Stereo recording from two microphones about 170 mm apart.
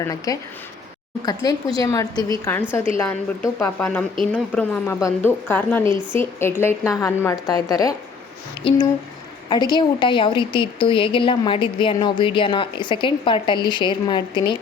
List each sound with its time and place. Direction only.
0.3 s a woman's voice: 20° left (ahead or behind)
5.8 s a woman's voice: 25° right (ahead or behind)
6.1 s a woman's voice: 15° left (ahead or behind)